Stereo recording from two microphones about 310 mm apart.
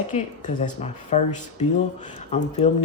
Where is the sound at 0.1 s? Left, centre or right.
Left.